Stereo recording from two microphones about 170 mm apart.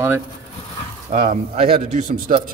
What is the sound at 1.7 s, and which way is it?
Speech, 50° right (ahead or behind).